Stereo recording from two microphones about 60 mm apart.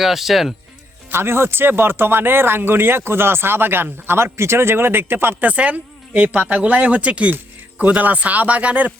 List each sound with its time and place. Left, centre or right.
0.0 s speech: centre
1.1 s speech: right
5.5 s speech: right